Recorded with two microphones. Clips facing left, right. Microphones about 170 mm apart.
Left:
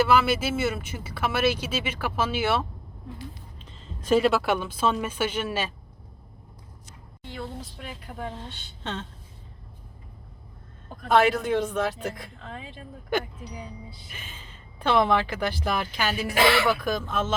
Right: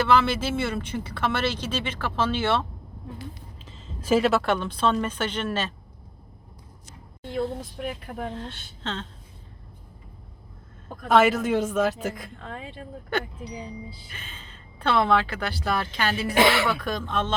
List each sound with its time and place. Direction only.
0.0 s speech: 5° left (ahead or behind)
3.7 s speech: centre (ahead or behind)
8.8 s speech: 10° left (ahead or behind)
11.1 s a woman's voice: 5° right (ahead or behind)
14.1 s speech: 10° left (ahead or behind)
16.3 s speech: 20° right (ahead or behind)
16.6 s speech: 5° left (ahead or behind)